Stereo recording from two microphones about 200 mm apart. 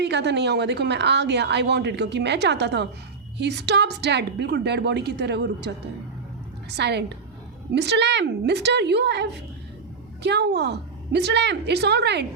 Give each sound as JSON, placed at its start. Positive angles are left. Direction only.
{"t": 0.0, "sound": "a woman's voice", "side_deg": -60}